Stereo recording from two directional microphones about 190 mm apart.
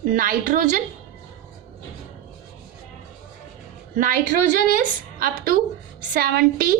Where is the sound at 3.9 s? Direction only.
45° right (ahead or behind).